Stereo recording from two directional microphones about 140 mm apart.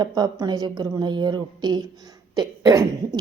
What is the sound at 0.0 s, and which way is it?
Speech, 30° right (ahead or behind).